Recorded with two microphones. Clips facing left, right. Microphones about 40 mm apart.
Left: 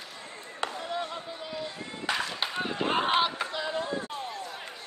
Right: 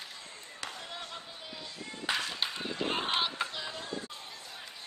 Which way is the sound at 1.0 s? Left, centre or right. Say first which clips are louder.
Left 9 dB; left.